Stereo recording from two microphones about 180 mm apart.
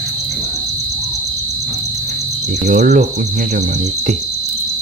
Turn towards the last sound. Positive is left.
turn(degrees=-45)  # may be behind; listen again after turning